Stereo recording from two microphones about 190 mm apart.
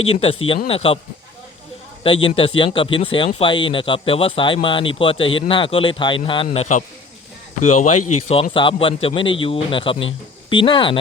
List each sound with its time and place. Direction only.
0.1 s speech: 30° left (ahead or behind)
2.0 s speech: 30° left (ahead or behind)